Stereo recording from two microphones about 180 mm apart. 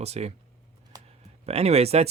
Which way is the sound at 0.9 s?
20° right (ahead or behind).